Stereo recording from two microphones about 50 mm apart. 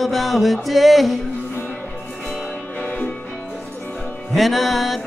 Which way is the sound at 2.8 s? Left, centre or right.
Left.